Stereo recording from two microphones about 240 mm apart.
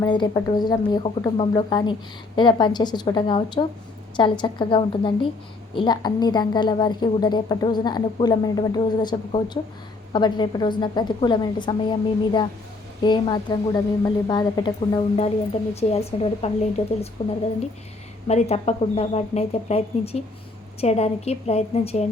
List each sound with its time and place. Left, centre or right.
0.0 s a woman's voice: centre
18.3 s a woman's voice: left